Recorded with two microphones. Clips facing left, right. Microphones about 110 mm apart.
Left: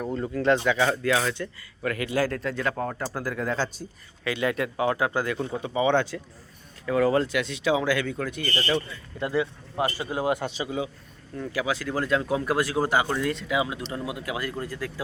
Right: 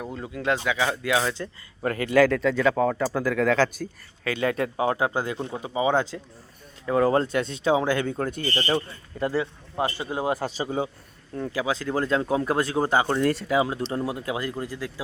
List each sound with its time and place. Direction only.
0.0 s speech: 5° right (ahead or behind)
1.2 s speech: 20° right (ahead or behind)
1.8 s a man's voice: 35° right (ahead or behind)
2.0 s speech: 65° right (ahead or behind); by 3.7 s 90° right
4.2 s a man's voice: 35° right (ahead or behind)
9.7 s a man's voice: 25° right (ahead or behind); by 10.8 s 40° right (ahead or behind)
11.5 s a man's voice: 25° right (ahead or behind)